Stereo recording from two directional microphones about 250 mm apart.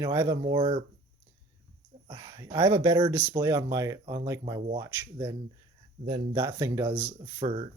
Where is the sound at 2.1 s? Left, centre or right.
Centre.